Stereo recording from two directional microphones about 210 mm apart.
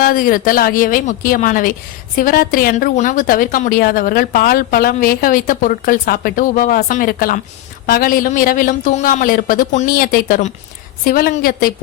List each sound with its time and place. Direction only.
0.0 s a woman's voice: 40° left (ahead or behind)